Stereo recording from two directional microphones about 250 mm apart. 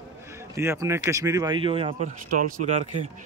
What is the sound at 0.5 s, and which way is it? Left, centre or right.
Speech, centre.